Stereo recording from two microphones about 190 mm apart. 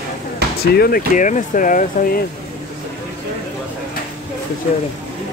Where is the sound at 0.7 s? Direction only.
50° left (ahead or behind).